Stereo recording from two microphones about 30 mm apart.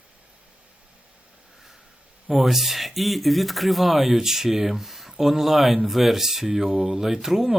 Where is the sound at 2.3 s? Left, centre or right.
Centre.